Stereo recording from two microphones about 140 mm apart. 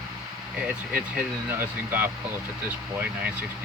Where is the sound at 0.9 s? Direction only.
15° right (ahead or behind).